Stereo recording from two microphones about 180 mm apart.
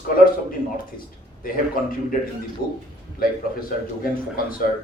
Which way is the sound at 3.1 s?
55° left (ahead or behind).